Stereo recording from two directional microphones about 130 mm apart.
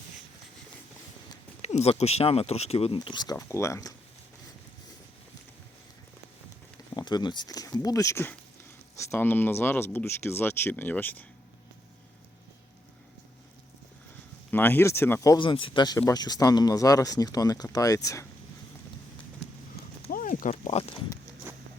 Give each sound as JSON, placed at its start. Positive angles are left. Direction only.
{"t": 1.6, "sound": "speech", "side_deg": 55}
{"t": 6.9, "sound": "speech", "side_deg": 35}
{"t": 14.5, "sound": "speech", "side_deg": 15}
{"t": 15.4, "sound": "speech", "side_deg": 40}
{"t": 20.1, "sound": "a sound", "side_deg": 90}
{"t": 21.5, "sound": "a sound", "side_deg": -20}